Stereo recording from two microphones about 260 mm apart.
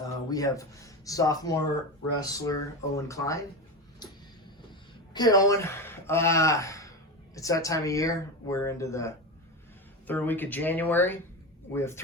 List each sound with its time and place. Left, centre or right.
0.3 s speech: centre
4.0 s vehicle: centre
5.1 s speech: centre